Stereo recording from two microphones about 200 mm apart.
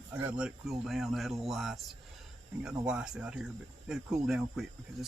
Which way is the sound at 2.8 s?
5° right (ahead or behind).